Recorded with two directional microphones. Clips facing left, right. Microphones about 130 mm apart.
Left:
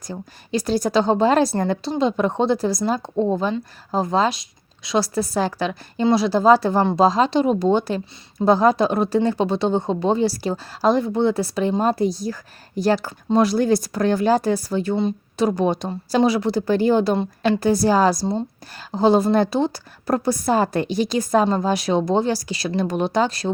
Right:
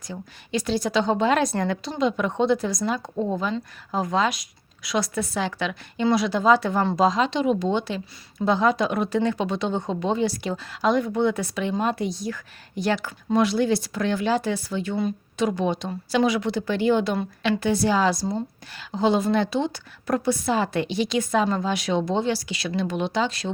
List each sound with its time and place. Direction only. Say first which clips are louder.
0.1 s a woman's voice: left 3 dB; 40° left (ahead or behind)